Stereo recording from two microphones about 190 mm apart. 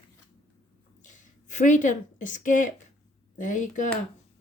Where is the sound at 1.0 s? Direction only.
40° left (ahead or behind).